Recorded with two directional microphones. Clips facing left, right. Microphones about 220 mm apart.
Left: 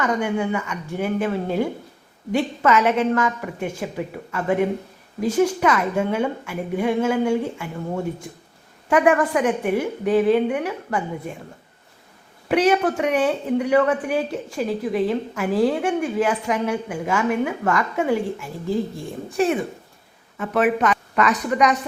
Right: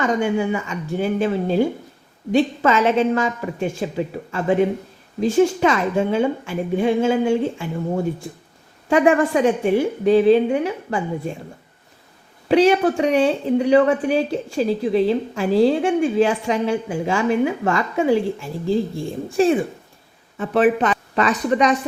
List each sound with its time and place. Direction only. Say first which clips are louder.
0.0 s speech: right 3 dB; 25° right (ahead or behind)
12.5 s speech: right 3 dB; 25° right (ahead or behind)